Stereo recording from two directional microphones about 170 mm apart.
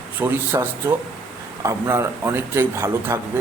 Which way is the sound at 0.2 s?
10° right (ahead or behind).